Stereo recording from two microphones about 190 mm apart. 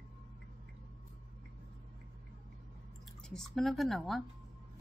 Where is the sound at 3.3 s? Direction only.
Centre (ahead or behind).